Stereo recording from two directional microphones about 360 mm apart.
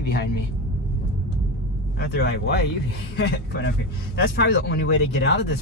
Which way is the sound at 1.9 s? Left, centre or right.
Left.